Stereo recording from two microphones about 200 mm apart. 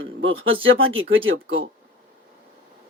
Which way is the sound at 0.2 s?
80° right.